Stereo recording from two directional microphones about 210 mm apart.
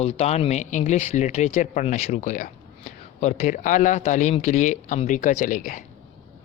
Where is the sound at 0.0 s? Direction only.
30° left (ahead or behind).